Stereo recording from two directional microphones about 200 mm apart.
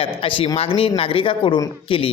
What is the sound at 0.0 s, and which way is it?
A man's voice, 25° left (ahead or behind).